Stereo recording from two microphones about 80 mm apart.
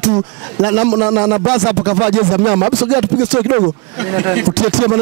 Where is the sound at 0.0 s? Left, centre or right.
Centre.